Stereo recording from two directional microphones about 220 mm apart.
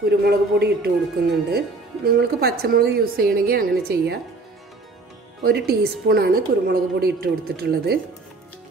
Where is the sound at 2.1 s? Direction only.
45° right (ahead or behind).